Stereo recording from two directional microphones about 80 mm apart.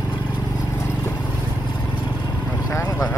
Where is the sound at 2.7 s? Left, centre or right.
Left.